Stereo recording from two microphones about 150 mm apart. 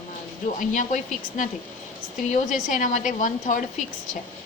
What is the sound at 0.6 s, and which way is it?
Speech, 60° left (ahead or behind).